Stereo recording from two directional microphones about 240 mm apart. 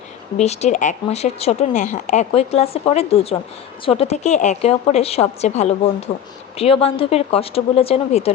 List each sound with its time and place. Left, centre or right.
0.3 s speech: left